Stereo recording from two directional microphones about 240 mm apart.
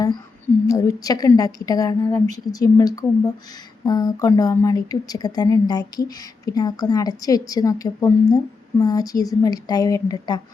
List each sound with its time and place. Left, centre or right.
0.7 s speech: centre